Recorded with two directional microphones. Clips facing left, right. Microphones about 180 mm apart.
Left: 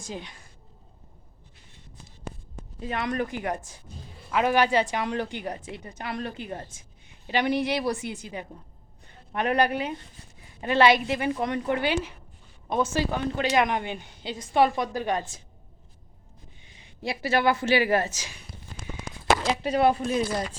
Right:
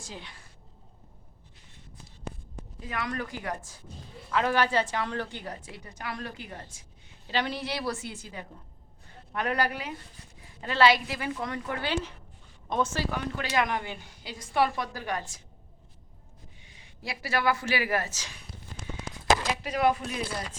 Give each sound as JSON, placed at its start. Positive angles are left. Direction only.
{"t": 0.0, "sound": "a woman's voice", "side_deg": 20}
{"t": 2.8, "sound": "a woman's voice", "side_deg": 25}
{"t": 13.1, "sound": "a woman's voice", "side_deg": 25}
{"t": 16.8, "sound": "a woman's voice", "side_deg": 25}
{"t": 18.1, "sound": "a woman's voice", "side_deg": 10}
{"t": 19.6, "sound": "speech", "side_deg": 30}